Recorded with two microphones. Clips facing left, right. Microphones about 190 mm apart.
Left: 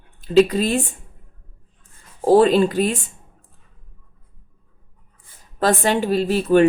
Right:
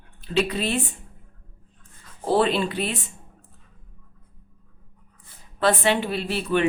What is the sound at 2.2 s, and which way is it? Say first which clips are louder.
Speech: left 8 dB; 40° left (ahead or behind).